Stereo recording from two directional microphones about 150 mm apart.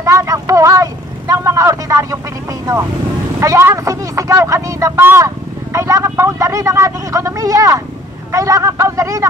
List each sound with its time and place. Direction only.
0.0 s speech: 20° right (ahead or behind)